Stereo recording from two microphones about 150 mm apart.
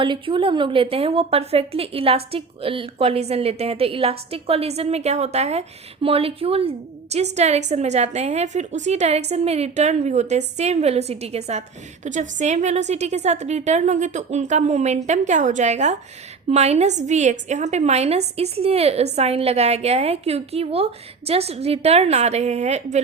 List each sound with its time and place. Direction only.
0.0 s a woman's voice: 35° right (ahead or behind); by 23.0 s 50° right (ahead or behind)